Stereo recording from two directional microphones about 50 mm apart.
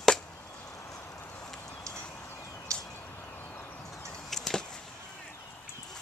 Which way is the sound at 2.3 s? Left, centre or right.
Left.